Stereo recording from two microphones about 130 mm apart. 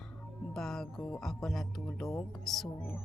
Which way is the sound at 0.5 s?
5° left (ahead or behind).